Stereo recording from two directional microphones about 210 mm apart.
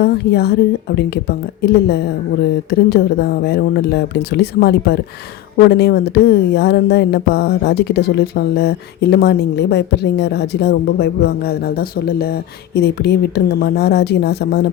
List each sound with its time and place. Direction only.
0.0 s speech: 50° left (ahead or behind)